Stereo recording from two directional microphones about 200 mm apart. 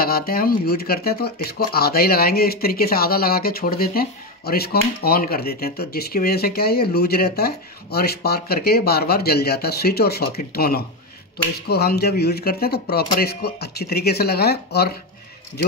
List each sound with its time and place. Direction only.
0.0 s speech: 50° left (ahead or behind)